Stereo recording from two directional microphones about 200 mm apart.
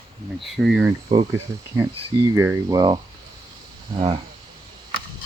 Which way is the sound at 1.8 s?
15° right (ahead or behind).